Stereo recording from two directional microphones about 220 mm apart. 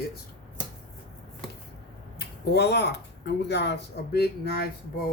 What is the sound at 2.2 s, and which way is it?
Speech, 45° left (ahead or behind).